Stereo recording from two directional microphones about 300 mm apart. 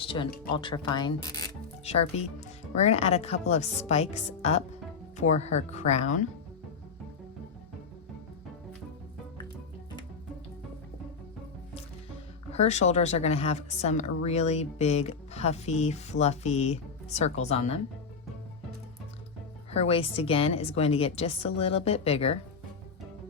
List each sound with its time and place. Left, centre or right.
0.0 s a woman's voice: centre
12.5 s a woman's voice: left
19.7 s a woman's voice: centre